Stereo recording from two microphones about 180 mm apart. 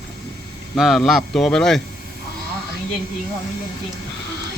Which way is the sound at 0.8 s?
Centre (ahead or behind).